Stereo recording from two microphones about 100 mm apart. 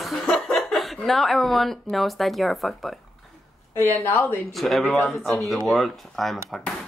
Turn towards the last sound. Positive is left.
turn(degrees=0)  # may be behind; listen again after turning